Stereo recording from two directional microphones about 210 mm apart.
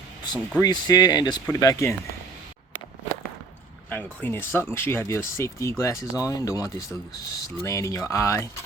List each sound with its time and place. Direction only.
0.6 s speech: 20° left (ahead or behind)
3.8 s speech: 10° left (ahead or behind)